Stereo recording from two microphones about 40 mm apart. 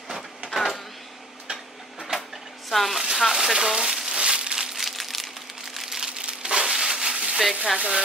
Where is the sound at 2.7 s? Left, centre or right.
Centre.